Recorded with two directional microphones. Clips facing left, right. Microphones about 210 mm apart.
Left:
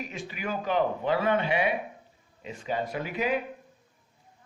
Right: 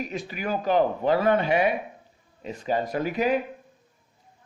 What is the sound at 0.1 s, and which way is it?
Speech, 40° right (ahead or behind).